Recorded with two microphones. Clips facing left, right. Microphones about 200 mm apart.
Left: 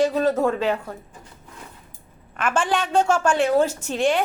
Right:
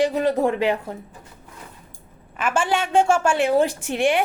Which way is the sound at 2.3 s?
5° right (ahead or behind).